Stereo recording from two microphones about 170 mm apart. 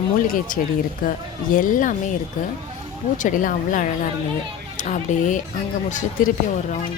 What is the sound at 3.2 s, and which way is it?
Speech, 50° left (ahead or behind).